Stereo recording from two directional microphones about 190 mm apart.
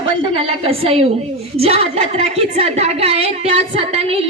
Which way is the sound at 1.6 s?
30° right (ahead or behind).